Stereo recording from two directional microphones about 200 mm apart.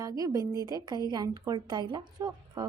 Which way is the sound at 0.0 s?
15° right (ahead or behind).